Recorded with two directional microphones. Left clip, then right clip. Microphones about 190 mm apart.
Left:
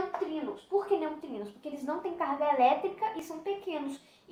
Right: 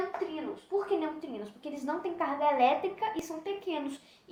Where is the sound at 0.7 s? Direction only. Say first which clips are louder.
Left 1 dB; 15° right (ahead or behind).